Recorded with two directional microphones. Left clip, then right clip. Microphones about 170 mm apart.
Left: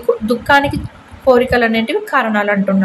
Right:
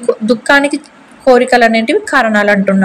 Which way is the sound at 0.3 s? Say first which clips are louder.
Right 3 dB; 20° right (ahead or behind).